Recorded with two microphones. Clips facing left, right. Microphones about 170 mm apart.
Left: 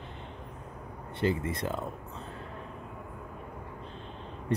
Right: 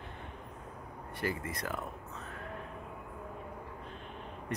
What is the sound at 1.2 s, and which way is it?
Speech, 25° left (ahead or behind).